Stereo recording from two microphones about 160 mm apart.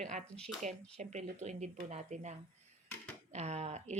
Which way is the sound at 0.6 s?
50° right (ahead or behind).